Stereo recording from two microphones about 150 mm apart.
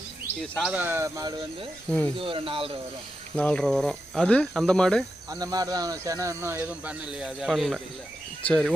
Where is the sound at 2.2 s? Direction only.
35° right (ahead or behind).